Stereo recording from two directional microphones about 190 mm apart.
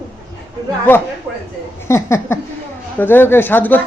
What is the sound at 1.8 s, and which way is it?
A man's voice, 15° left (ahead or behind).